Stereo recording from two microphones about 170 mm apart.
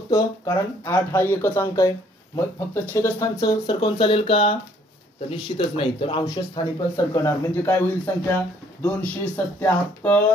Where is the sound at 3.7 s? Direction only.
30° left (ahead or behind).